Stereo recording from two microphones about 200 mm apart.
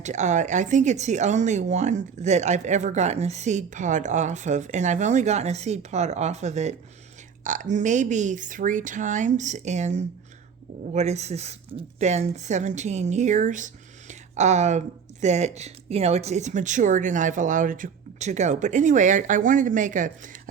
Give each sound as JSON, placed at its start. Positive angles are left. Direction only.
{"t": 0.0, "sound": "speech", "side_deg": -35}